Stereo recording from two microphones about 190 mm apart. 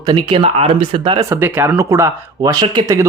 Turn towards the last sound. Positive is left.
turn(degrees=-20)  # may be behind; listen again after turning